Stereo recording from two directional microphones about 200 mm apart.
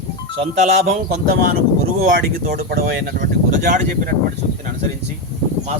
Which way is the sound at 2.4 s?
50° right (ahead or behind).